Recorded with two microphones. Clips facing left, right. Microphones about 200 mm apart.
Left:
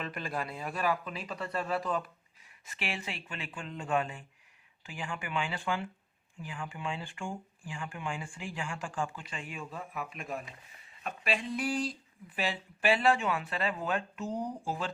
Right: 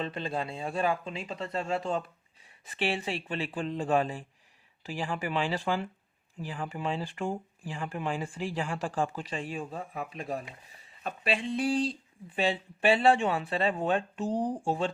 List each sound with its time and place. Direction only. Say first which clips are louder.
0.0 s speech: right 4 dB; 25° right (ahead or behind)